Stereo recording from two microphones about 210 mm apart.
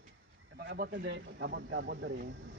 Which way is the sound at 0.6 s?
55° right (ahead or behind).